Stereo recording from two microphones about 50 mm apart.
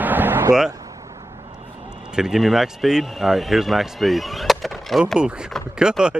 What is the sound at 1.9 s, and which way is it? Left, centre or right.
Speech, centre.